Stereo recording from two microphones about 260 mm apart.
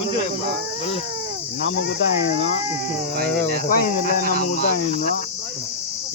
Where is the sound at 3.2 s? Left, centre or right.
Right.